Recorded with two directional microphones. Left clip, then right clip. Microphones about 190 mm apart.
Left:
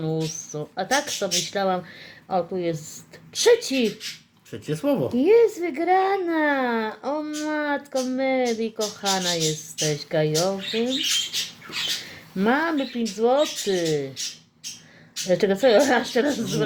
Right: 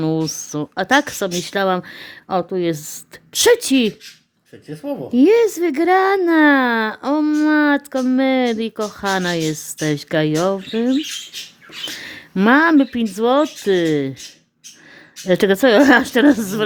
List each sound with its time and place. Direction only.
0.0 s speech: 50° right (ahead or behind)
4.6 s speech: 45° left (ahead or behind)
5.1 s speech: 45° right (ahead or behind)
12.0 s speech: 50° right (ahead or behind)
15.3 s speech: 50° right (ahead or behind)